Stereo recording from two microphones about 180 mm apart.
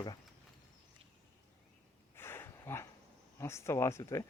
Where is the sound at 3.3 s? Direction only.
15° left (ahead or behind).